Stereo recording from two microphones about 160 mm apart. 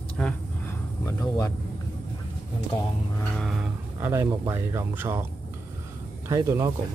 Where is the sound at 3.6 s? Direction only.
15° right (ahead or behind).